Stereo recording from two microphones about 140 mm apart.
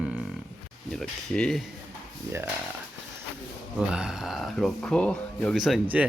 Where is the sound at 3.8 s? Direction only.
5° right (ahead or behind).